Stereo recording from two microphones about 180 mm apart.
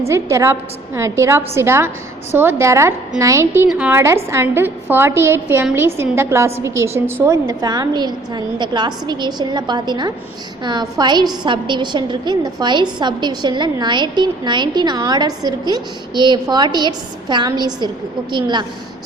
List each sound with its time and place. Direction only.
0.1 s a woman's voice: 15° right (ahead or behind)